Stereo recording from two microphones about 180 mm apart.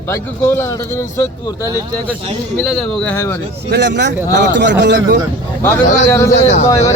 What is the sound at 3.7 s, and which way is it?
Speech, 75° right (ahead or behind).